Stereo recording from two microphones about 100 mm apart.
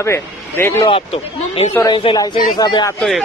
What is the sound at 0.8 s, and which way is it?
Speech, 75° left (ahead or behind).